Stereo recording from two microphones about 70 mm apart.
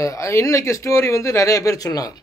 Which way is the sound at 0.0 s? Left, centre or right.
Left.